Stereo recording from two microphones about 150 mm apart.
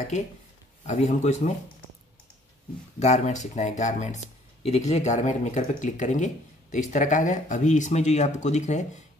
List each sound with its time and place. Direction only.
0.8 s speech: 50° left (ahead or behind)
3.0 s speech: 50° left (ahead or behind)